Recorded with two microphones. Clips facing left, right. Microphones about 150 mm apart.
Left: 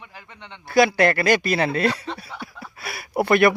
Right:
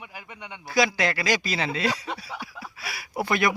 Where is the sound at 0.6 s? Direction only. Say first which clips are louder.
Left 7 dB; 55° left (ahead or behind).